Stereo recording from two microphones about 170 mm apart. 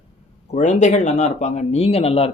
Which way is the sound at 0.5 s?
45° left (ahead or behind).